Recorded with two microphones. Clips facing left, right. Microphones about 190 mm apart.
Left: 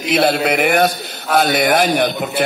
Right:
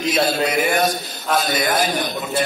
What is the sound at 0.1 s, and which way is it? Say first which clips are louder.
A man's voice: left 5 dB; 65° left (ahead or behind).